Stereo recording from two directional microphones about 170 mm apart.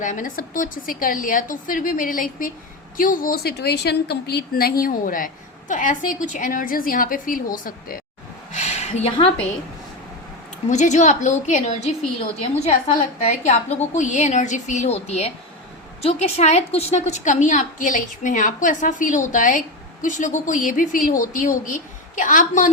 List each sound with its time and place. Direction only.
0.0 s a woman's voice: 50° left (ahead or behind)
8.5 s a sound: 40° left (ahead or behind)
10.7 s a woman's voice: 45° left (ahead or behind)
13.2 s a woman's voice: 45° left (ahead or behind)